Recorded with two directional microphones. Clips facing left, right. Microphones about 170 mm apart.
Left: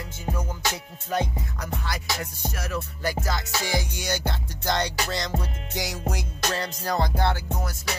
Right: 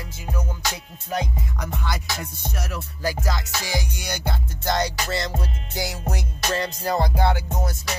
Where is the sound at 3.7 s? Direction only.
15° right (ahead or behind).